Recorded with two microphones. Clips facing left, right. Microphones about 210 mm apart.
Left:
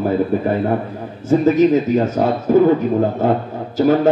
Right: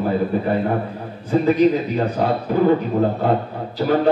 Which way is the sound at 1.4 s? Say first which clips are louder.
Left 2 dB; 45° left (ahead or behind).